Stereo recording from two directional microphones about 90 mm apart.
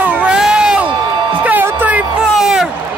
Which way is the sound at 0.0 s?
15° right (ahead or behind).